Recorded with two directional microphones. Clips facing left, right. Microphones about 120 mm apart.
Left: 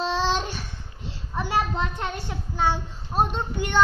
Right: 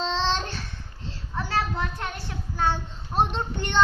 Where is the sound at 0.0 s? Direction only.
10° left (ahead or behind).